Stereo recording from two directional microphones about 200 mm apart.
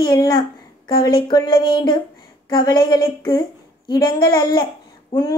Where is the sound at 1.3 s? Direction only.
25° left (ahead or behind).